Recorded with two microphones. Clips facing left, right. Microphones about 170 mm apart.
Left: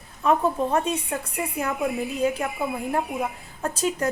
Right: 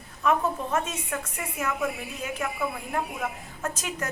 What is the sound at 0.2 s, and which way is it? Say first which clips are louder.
A woman's voice: left 4 dB; 30° left (ahead or behind).